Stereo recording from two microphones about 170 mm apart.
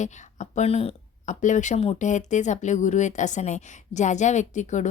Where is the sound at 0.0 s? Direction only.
45° left (ahead or behind).